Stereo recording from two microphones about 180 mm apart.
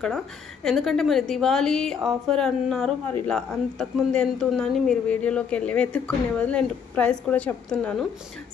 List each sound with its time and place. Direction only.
0.7 s a woman's voice: centre (ahead or behind)